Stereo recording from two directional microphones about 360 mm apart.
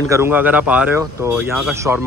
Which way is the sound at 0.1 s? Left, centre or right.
Centre.